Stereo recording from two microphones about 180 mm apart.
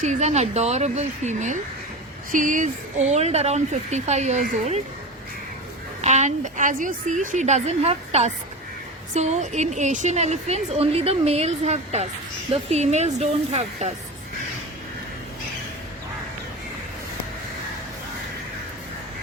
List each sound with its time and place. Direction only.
0.0 s a woman's voice: 40° right (ahead or behind)
6.0 s a woman's voice: 40° right (ahead or behind)